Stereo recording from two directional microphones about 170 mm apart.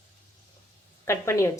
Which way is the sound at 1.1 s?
15° left (ahead or behind).